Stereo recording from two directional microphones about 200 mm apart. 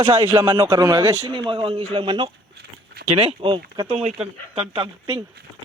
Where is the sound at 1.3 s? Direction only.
25° right (ahead or behind).